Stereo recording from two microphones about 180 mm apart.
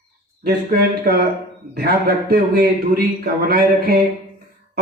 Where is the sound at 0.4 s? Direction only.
55° right (ahead or behind).